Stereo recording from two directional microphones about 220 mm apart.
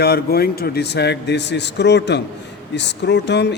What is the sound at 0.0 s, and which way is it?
A man's voice, 45° left (ahead or behind).